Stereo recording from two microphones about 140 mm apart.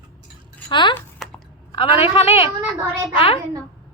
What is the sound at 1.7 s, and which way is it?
Speech, 40° left (ahead or behind).